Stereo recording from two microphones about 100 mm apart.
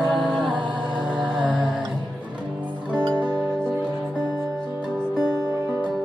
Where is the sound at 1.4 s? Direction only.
15° right (ahead or behind).